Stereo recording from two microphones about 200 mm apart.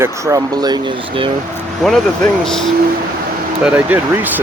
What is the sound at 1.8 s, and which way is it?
Speech, centre (ahead or behind).